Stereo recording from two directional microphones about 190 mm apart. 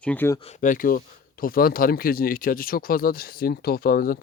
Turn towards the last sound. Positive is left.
turn(degrees=50)  # may be behind; listen again after turning